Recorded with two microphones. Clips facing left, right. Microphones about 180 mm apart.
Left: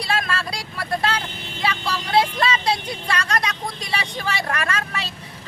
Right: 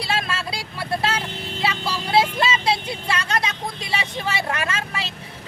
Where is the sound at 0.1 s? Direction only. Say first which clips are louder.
Left 2 dB; 25° right (ahead or behind).